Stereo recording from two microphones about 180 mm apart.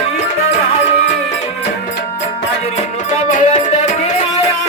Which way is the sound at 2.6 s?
40° left (ahead or behind).